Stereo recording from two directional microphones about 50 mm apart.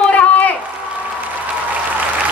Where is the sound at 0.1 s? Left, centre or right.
Left.